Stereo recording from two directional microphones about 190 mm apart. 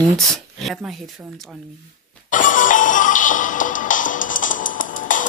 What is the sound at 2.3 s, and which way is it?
Music, 45° left (ahead or behind).